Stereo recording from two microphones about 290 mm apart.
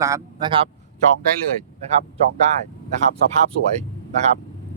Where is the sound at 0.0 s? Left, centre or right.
Centre.